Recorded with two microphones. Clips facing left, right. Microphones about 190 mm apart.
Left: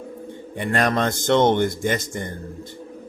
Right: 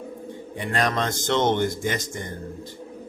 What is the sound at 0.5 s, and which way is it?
Speech, 55° left (ahead or behind).